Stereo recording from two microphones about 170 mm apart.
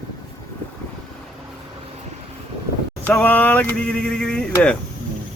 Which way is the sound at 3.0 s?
10° left (ahead or behind).